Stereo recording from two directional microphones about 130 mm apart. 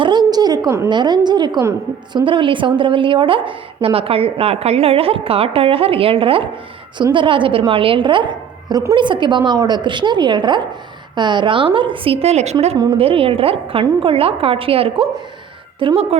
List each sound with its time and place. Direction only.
0.0 s a sound: 35° right (ahead or behind)
0.9 s a woman's voice: 35° right (ahead or behind); by 12.7 s 55° right (ahead or behind)
13.0 s a woman's voice: 45° right (ahead or behind)